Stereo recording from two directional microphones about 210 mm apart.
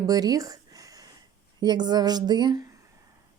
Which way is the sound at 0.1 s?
20° right (ahead or behind).